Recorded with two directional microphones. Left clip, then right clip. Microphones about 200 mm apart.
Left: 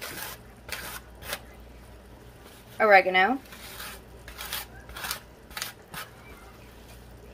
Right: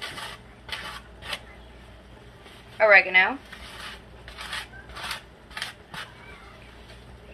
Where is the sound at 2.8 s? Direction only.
70° left (ahead or behind).